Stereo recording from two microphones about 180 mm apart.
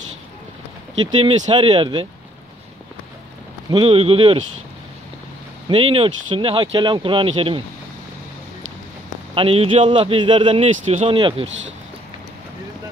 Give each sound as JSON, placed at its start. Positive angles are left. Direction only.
{"t": 1.5, "sound": "speech", "side_deg": -30}
{"t": 3.7, "sound": "a man's voice", "side_deg": -30}
{"t": 5.7, "sound": "a man's voice", "side_deg": -30}
{"t": 9.3, "sound": "a man's voice", "side_deg": -30}